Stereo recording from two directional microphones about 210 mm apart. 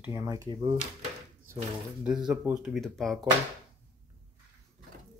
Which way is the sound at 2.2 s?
5° right (ahead or behind).